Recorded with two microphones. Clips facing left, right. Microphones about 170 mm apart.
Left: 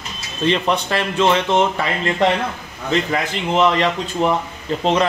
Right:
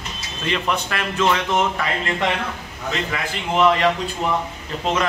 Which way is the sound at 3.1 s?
35° left (ahead or behind).